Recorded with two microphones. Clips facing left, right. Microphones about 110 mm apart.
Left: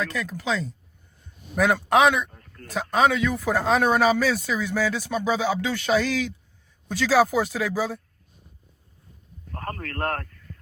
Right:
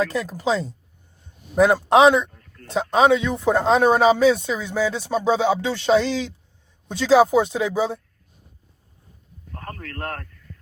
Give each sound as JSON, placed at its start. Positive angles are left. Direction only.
{"t": 0.0, "sound": "speech", "side_deg": -35}
{"t": 2.3, "sound": "a sound", "side_deg": 45}
{"t": 3.0, "sound": "speech", "side_deg": -25}
{"t": 9.5, "sound": "a man's voice", "side_deg": 45}